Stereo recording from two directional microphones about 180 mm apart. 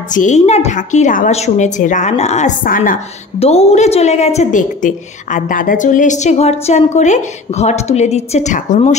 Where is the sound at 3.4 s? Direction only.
35° left (ahead or behind).